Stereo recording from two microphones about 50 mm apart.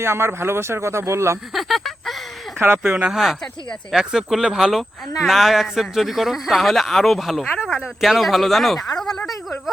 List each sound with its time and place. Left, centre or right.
0.0 s speech: right
1.5 s a sound: centre
2.6 s speech: right
3.1 s speech: centre